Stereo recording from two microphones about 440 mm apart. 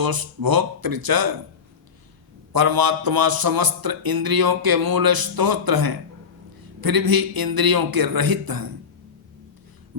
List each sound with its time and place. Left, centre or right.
0.0 s speech: right
2.5 s speech: right
9.9 s a sound: right